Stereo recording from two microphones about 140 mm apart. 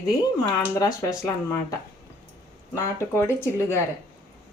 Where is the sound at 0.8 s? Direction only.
25° left (ahead or behind).